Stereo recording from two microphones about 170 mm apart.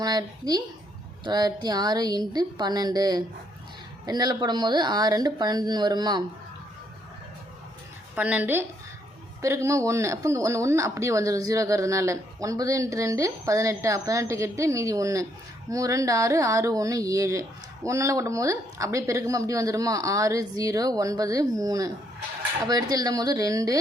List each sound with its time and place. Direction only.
0.0 s speech: 25° right (ahead or behind)
8.1 s a woman's voice: 10° right (ahead or behind)